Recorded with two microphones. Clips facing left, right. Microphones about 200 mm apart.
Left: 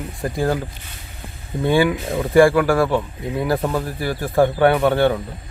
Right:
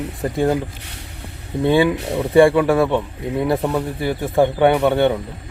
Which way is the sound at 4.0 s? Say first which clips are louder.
Even; 20° right (ahead or behind).